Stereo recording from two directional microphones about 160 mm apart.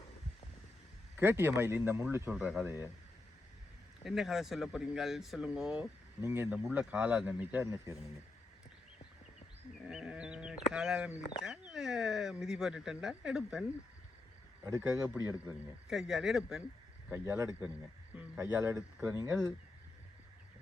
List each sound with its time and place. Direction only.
1.1 s a man's voice: 15° right (ahead or behind)
4.0 s speech: centre (ahead or behind)
6.2 s a man's voice: 15° right (ahead or behind)
9.8 s a sound: 5° right (ahead or behind)
11.4 s speech: 5° right (ahead or behind)
14.6 s speech: 20° right (ahead or behind)
15.9 s speech: centre (ahead or behind)
17.1 s a man's voice: 20° right (ahead or behind)